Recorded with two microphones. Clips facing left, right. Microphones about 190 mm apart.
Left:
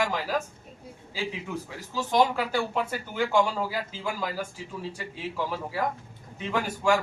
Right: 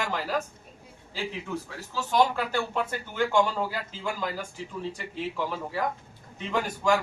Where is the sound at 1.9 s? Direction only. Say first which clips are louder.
Left 1 dB; 10° left (ahead or behind).